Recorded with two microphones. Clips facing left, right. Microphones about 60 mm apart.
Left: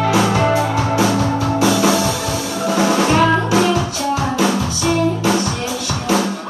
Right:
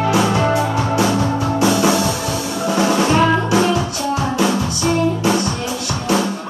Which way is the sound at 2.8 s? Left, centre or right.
Left.